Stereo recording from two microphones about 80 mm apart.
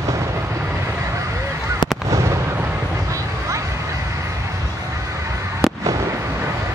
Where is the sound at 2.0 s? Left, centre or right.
Right.